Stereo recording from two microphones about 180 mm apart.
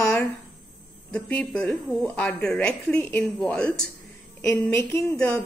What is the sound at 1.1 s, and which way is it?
A woman's voice, 5° left (ahead or behind).